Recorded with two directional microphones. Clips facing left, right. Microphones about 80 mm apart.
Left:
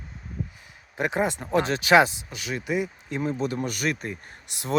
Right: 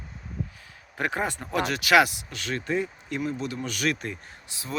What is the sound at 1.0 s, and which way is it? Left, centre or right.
Speech, centre.